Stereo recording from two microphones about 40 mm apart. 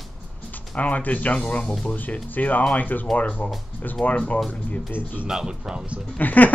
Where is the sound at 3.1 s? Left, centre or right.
Left.